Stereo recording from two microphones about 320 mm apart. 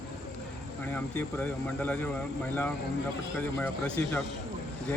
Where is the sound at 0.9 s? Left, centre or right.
Centre.